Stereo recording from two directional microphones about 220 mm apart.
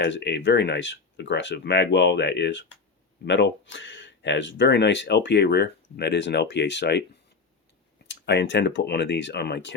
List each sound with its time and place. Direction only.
0.0 s speech: 50° left (ahead or behind)
8.0 s speech: 50° left (ahead or behind)